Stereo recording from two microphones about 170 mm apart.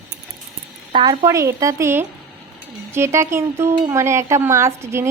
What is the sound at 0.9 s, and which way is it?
Speech, 25° right (ahead or behind).